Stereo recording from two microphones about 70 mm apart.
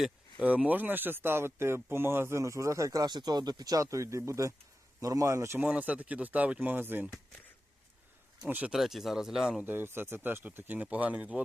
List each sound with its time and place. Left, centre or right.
0.4 s speech: centre; by 3.1 s right
3.1 s speech: right
3.8 s a man's voice: right
5.6 s speech: centre
8.4 s speech: right
8.7 s speech: centre
9.6 s speech: right; by 11.4 s centre